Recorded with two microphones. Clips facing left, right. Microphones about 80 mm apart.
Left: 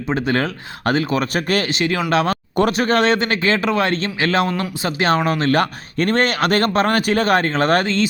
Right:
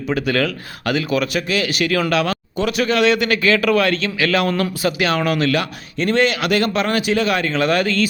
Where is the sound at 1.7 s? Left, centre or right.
Left.